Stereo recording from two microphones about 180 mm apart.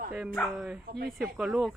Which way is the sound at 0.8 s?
60° right (ahead or behind).